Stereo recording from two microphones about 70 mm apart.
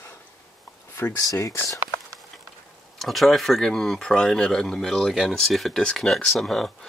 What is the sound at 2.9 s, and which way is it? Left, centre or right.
Speech, centre.